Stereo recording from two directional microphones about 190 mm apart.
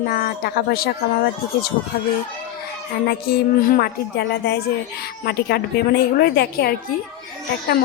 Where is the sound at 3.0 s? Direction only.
50° left (ahead or behind).